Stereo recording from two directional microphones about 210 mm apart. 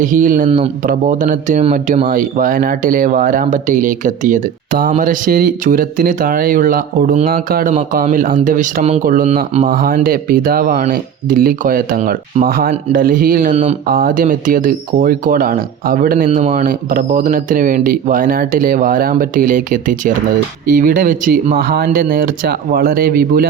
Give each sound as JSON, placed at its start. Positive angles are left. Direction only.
{"t": 0.0, "sound": "speech", "side_deg": -40}